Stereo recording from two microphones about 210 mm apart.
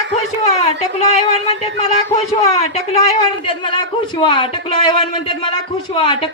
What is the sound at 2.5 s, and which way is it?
A man's voice, 30° left (ahead or behind).